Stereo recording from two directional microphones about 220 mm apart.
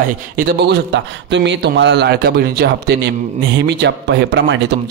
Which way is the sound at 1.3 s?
55° right (ahead or behind).